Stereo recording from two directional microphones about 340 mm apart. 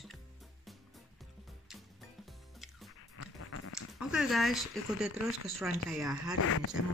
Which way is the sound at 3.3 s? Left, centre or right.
Left.